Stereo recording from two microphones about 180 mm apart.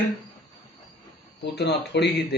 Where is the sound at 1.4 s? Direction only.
65° left (ahead or behind).